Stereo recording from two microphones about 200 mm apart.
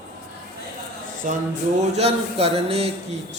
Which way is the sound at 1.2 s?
40° right (ahead or behind).